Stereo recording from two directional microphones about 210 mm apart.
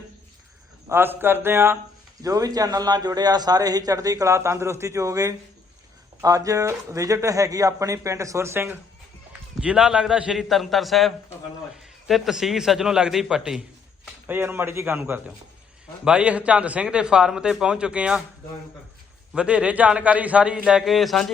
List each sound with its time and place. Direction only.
0.9 s a man's voice: 10° right (ahead or behind)
19.3 s speech: 5° right (ahead or behind)